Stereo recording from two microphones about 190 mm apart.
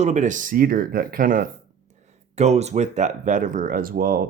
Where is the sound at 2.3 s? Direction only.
35° right (ahead or behind).